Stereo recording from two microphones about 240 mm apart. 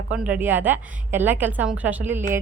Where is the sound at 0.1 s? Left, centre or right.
Centre.